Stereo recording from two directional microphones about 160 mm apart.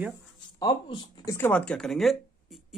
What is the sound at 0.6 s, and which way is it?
Speech, 30° left (ahead or behind).